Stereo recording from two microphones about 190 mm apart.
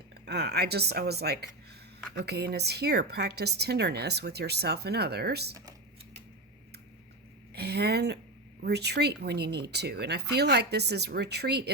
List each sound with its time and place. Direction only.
0.3 s a woman's voice: 60° right (ahead or behind)
7.5 s a woman's voice: 60° right (ahead or behind)